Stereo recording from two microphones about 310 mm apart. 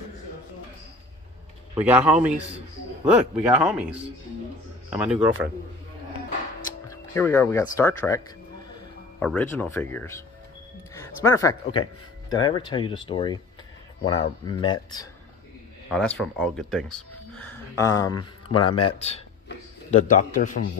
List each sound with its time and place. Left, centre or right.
1.8 s speech: centre
6.9 s speech: centre
9.2 s speech: centre
15.9 s a man's voice: centre; by 20.6 s left